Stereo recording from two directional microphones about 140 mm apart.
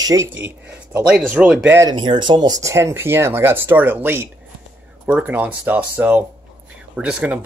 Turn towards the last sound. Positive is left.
turn(degrees=-10)  # may be behind; listen again after turning